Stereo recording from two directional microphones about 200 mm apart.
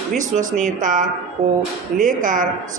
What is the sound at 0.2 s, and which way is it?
A woman's voice, 40° right (ahead or behind).